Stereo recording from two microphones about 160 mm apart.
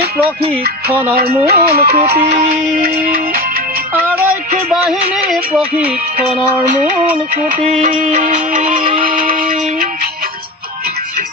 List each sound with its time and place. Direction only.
1.5 s music: 75° right (ahead or behind)
2.1 s music: 45° right (ahead or behind)
2.7 s music: 65° right (ahead or behind)
4.3 s music: 5° right (ahead or behind)
7.6 s music: 50° right (ahead or behind)
8.8 s music: 35° right (ahead or behind)